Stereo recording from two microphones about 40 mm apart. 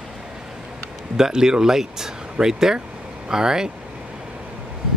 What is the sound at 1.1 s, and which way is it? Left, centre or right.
Speech, centre.